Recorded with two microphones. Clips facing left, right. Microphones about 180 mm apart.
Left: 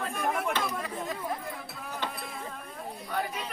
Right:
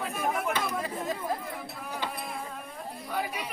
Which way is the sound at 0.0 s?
5° right (ahead or behind).